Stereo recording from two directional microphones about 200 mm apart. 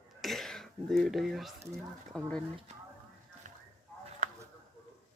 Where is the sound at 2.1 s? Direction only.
Centre (ahead or behind).